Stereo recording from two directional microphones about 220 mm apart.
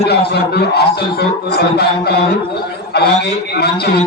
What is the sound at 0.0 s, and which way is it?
Speech, 45° left (ahead or behind).